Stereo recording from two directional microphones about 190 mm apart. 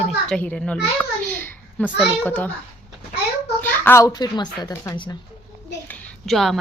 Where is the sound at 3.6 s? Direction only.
10° left (ahead or behind).